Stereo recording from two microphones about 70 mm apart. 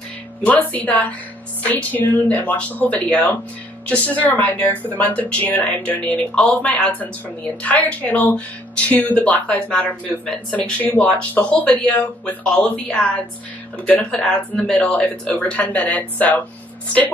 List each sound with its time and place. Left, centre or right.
0.5 s speech: left